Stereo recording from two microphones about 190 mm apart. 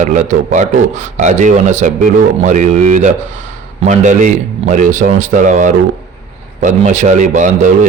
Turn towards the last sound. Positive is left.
turn(degrees=-40)  # may be behind; listen again after turning